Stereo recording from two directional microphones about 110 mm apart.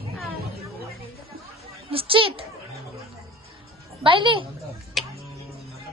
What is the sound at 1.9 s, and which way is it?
Speech, 55° right (ahead or behind).